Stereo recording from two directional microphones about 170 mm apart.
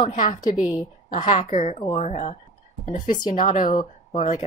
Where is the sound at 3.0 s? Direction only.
55° left (ahead or behind).